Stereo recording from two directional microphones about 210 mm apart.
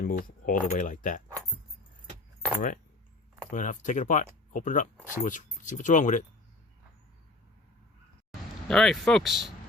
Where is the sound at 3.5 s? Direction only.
40° left (ahead or behind).